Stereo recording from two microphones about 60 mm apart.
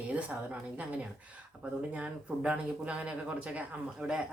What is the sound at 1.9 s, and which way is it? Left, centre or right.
A woman's voice, right.